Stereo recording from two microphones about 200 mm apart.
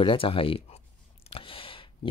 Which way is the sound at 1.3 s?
25° left (ahead or behind).